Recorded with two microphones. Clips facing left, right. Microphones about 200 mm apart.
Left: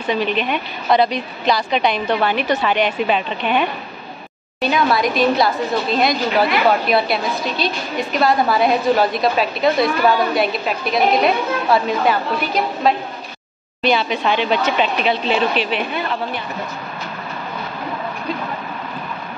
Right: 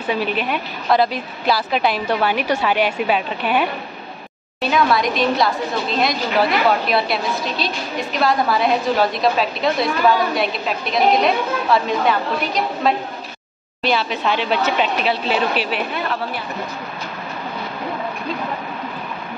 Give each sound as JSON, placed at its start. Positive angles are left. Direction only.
{"t": 0.0, "sound": "a woman's voice", "side_deg": -10}